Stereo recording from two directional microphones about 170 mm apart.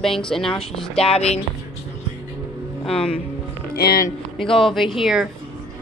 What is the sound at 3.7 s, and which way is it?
Speech, 65° left (ahead or behind).